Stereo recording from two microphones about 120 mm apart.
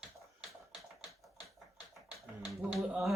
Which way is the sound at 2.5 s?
5° right (ahead or behind).